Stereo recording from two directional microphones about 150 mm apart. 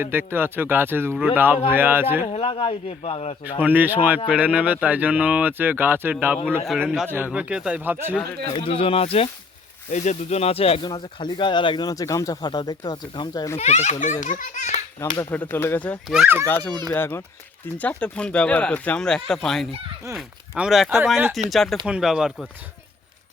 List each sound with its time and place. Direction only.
0.0 s speech: 15° right (ahead or behind)
2.2 s a man's voice: 35° left (ahead or behind)
3.6 s speech: 10° right (ahead or behind)
8.5 s a man's voice: 35° left (ahead or behind)
10.8 s speech: 30° left (ahead or behind)
13.6 s speech: 50° left (ahead or behind)
15.3 s speech: 10° left (ahead or behind)
16.2 s speech: 15° right (ahead or behind)
16.9 s speech: 15° left (ahead or behind); by 22.4 s 5° right (ahead or behind)